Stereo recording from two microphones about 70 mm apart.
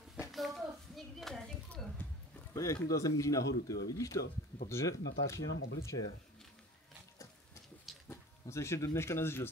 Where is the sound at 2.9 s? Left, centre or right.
Left.